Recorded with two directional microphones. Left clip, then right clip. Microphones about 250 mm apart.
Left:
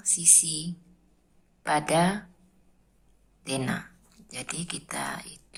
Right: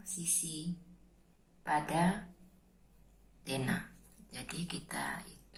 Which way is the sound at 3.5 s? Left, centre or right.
Left.